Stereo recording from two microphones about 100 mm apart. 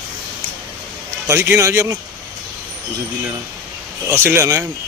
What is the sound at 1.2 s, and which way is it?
Speech, 25° right (ahead or behind).